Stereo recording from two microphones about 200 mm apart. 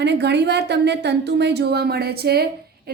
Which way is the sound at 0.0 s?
60° right (ahead or behind).